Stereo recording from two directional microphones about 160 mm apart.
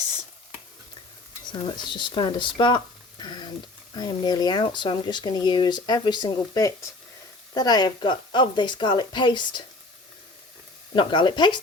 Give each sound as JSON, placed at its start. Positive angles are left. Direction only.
{"t": 1.5, "sound": "speech", "side_deg": 30}
{"t": 10.9, "sound": "speech", "side_deg": 30}